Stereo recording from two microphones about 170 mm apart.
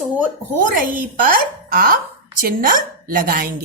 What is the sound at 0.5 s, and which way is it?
A woman's voice, 50° right (ahead or behind).